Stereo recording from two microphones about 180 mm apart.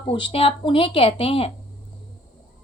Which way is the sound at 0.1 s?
30° left (ahead or behind).